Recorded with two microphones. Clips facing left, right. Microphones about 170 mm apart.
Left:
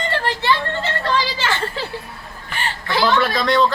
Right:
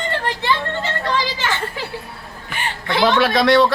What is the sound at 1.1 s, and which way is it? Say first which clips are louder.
Speech: left 1 dB; 15° right (ahead or behind).